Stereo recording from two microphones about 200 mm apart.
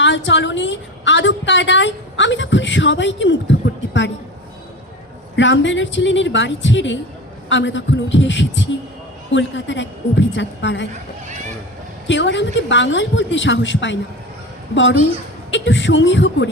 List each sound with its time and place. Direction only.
0.0 s a woman's voice: 65° left (ahead or behind)
5.4 s a woman's voice: 65° left (ahead or behind)
12.0 s a woman's voice: 65° left (ahead or behind)
15.4 s a woman's voice: 65° left (ahead or behind)